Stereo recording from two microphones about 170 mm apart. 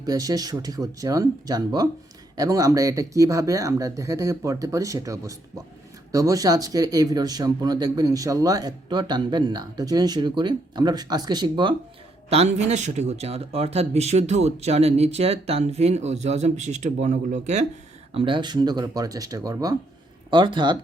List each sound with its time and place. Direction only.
0.0 s speech: 20° right (ahead or behind)
12.3 s speech: 40° right (ahead or behind)
18.1 s speech: 30° right (ahead or behind)